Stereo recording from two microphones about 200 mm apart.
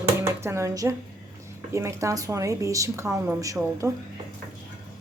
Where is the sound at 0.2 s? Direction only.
15° right (ahead or behind).